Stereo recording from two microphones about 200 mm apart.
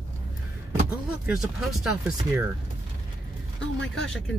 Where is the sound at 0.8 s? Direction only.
5° right (ahead or behind).